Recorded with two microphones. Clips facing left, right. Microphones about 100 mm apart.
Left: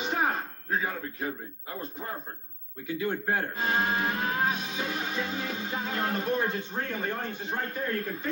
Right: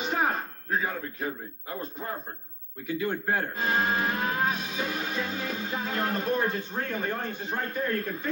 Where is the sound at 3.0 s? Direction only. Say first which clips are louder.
Even; 25° left (ahead or behind).